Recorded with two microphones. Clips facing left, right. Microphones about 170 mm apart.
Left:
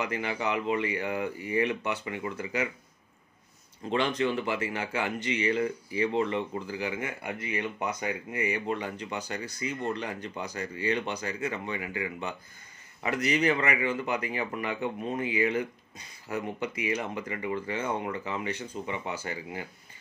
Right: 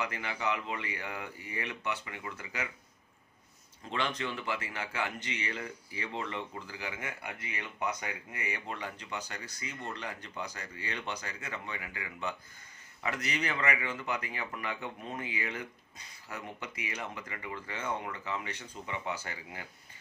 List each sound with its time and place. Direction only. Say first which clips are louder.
0.0 s speech: left 4 dB; 20° left (ahead or behind)
3.9 s speech: left 8 dB; 20° left (ahead or behind)
8.3 s speech: left 11 dB; 20° left (ahead or behind)